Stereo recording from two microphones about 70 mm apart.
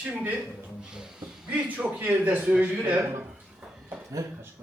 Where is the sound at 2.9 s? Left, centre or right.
Right.